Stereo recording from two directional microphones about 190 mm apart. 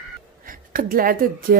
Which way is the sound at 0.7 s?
50° right (ahead or behind).